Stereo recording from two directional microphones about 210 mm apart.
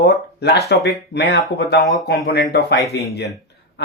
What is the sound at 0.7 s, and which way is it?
Speech, 55° left (ahead or behind).